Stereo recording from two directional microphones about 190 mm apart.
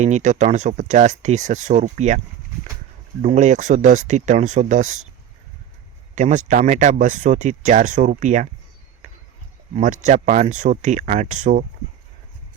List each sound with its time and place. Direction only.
0.0 s speech: 40° right (ahead or behind)
6.1 s speech: 40° right (ahead or behind)
9.7 s speech: 40° right (ahead or behind)